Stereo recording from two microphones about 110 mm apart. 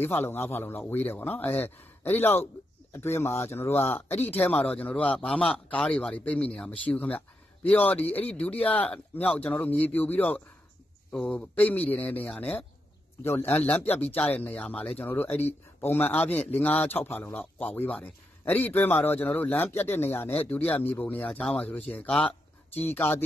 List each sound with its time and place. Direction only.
0.0 s a man's voice: 20° left (ahead or behind)
22.8 s a man's voice: 15° left (ahead or behind)